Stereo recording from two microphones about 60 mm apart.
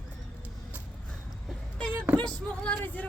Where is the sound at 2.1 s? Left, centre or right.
Left.